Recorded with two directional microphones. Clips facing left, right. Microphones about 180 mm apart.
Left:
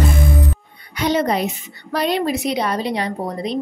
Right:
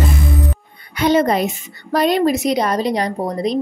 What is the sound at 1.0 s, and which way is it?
A woman's voice, 50° right (ahead or behind).